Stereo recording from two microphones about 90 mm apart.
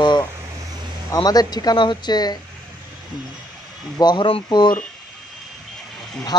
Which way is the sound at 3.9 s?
55° left (ahead or behind).